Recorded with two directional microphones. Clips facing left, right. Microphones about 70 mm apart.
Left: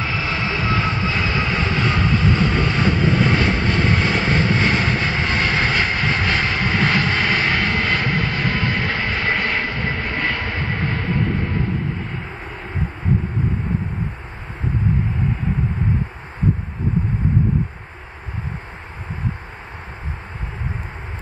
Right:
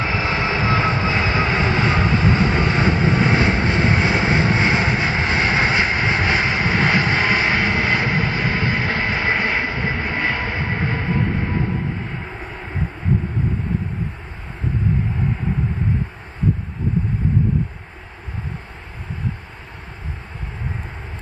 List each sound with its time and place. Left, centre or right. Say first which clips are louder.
0.0 s vehicle: right 2 dB; right
9.9 s train: right 1 dB; centre